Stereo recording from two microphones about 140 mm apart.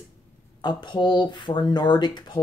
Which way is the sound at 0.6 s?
30° left (ahead or behind).